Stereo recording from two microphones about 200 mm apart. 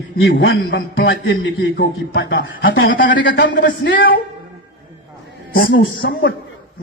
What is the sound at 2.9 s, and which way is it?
A man's voice, 65° left (ahead or behind).